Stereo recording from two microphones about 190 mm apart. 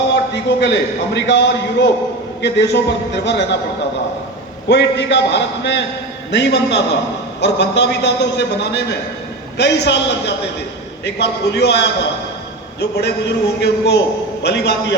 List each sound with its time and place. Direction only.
0.6 s a man's voice: 65° left (ahead or behind)
4.7 s a man's voice: 65° left (ahead or behind)